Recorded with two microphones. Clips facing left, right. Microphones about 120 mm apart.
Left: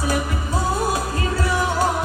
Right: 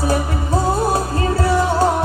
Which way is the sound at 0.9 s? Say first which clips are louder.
Right 5 dB; 35° right (ahead or behind).